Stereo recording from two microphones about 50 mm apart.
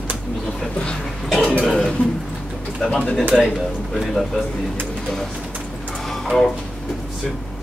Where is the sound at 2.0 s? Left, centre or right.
Left.